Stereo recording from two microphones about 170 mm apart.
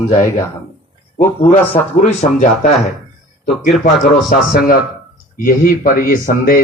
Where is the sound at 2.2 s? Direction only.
50° left (ahead or behind).